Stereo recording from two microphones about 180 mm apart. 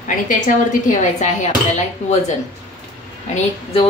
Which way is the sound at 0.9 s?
40° left (ahead or behind).